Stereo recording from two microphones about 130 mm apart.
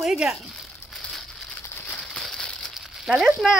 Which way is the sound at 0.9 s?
Centre (ahead or behind).